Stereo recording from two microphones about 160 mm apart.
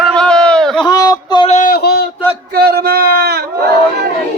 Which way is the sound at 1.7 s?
85° left.